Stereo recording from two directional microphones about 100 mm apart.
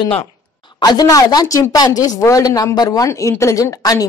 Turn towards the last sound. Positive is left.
turn(degrees=35)  # may be behind; listen again after turning